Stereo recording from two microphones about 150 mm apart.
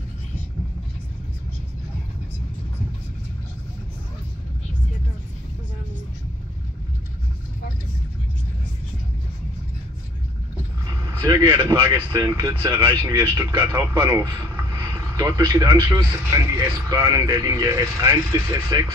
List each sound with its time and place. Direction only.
11.0 s a man's voice: 20° right (ahead or behind)